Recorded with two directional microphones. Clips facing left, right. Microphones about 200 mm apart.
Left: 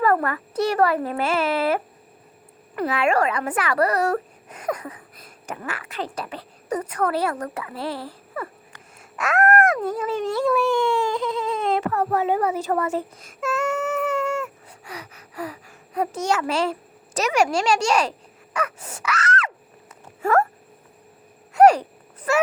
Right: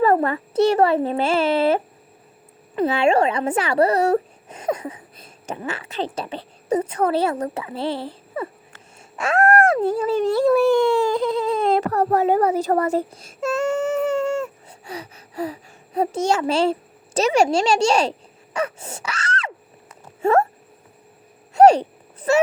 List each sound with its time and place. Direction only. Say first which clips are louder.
0.0 s speech: right 3 dB; 25° right (ahead or behind)
18.5 s wail: right 3 dB; 25° right (ahead or behind)
20.2 s speech: right 3 dB; 25° right (ahead or behind)
21.5 s a sound: right 2 dB; 25° right (ahead or behind)